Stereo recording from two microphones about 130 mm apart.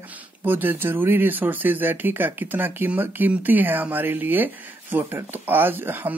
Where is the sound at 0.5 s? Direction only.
15° right (ahead or behind).